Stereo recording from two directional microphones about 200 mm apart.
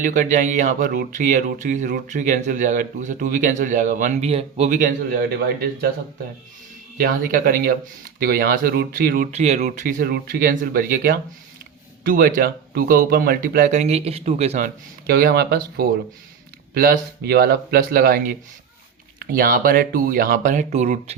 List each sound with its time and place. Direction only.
0.0 s speech: 40° right (ahead or behind)
7.0 s speech: 45° right (ahead or behind)
15.0 s speech: 50° right (ahead or behind); by 21.2 s 35° right (ahead or behind)